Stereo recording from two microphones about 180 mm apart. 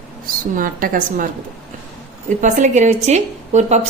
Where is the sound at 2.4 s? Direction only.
40° right (ahead or behind).